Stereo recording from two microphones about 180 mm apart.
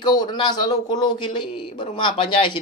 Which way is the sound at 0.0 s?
25° left (ahead or behind).